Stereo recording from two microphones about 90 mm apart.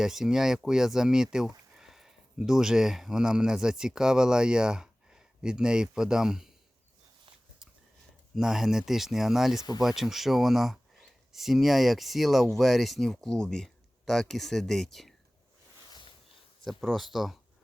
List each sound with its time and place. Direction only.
0.0 s speech: 5° right (ahead or behind)
8.4 s speech: 5° right (ahead or behind)
16.6 s speech: centre (ahead or behind)